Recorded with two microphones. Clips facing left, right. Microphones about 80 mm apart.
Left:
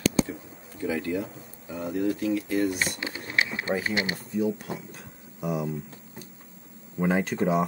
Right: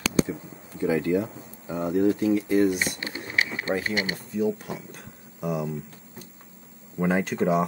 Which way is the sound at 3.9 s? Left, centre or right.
Left.